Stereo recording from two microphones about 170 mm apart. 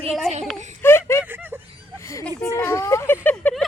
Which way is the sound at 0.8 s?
15° left (ahead or behind).